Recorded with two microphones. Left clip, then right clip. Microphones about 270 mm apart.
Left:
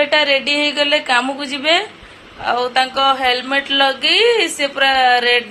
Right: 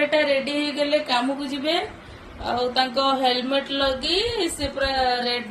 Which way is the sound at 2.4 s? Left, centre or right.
Left.